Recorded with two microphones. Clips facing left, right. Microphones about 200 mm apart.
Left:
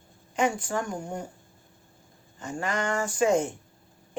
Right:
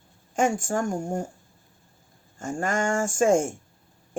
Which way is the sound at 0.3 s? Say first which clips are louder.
Right 3 dB; 45° right (ahead or behind).